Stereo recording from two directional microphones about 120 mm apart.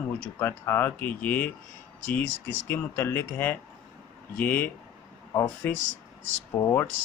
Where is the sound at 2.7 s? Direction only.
15° left (ahead or behind).